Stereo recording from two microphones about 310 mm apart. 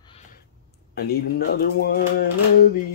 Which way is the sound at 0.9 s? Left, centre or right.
Left.